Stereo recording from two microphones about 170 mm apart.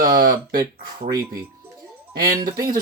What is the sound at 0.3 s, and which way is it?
Speech, 20° right (ahead or behind).